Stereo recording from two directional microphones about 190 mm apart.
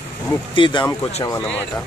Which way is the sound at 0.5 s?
25° left (ahead or behind).